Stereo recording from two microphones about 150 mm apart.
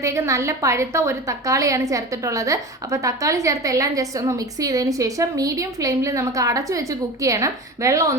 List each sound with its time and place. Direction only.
0.0 s a woman's voice: 20° right (ahead or behind)